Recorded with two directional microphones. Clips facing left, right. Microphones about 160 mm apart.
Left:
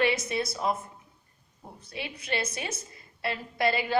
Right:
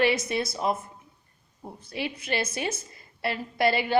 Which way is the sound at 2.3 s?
30° right (ahead or behind).